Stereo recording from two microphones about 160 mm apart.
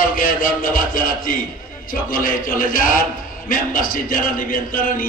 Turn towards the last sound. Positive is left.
turn(degrees=60)  # may be behind; listen again after turning